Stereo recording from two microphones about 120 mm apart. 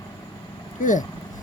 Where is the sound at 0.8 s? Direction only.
90° left.